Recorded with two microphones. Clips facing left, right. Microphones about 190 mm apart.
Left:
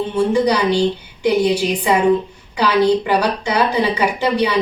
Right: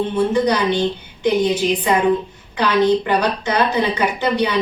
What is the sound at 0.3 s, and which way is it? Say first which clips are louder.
Speech: left 3 dB; 10° left (ahead or behind).